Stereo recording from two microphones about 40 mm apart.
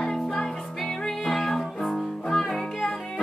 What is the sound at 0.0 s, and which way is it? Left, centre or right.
Music, centre.